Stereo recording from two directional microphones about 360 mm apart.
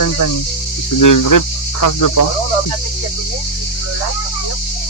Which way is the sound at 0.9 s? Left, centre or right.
Left.